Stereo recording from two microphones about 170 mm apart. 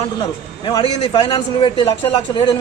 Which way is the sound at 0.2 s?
25° left (ahead or behind).